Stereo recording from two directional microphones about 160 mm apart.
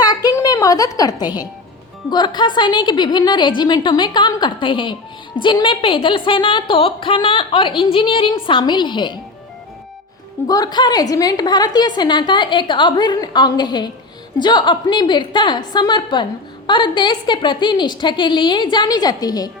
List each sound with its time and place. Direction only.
0.0 s a sound: 25° left (ahead or behind)
2.0 s a woman's voice: 25° left (ahead or behind)
10.5 s a woman's voice: 25° left (ahead or behind)